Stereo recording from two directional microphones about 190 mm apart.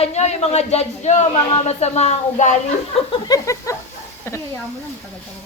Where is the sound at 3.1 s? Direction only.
20° left (ahead or behind).